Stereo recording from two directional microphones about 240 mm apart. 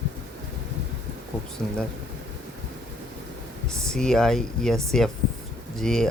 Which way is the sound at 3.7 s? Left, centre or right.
Centre.